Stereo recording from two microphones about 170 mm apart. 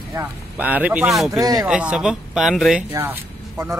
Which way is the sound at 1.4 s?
20° right (ahead or behind).